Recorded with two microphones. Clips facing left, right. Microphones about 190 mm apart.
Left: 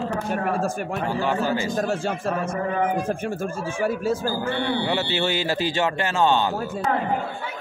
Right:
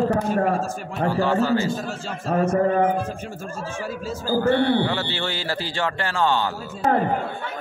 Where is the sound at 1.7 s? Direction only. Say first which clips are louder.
Left 6 dB; 55° left (ahead or behind).